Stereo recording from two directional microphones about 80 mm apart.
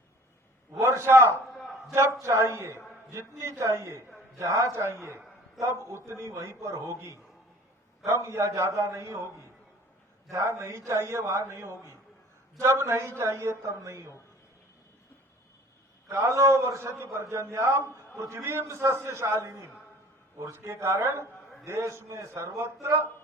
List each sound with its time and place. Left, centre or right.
0.8 s a man's voice: right
1.5 s a sound: centre
1.9 s a man's voice: right
10.3 s a man's voice: right
16.0 s a man's voice: right